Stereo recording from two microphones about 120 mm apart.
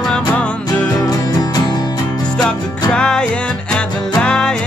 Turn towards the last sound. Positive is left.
turn(degrees=5)  # may be behind; listen again after turning